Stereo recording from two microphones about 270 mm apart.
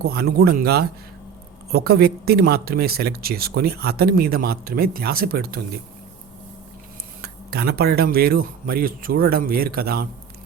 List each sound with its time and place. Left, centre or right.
0.0 s speech: right
7.2 s speech: right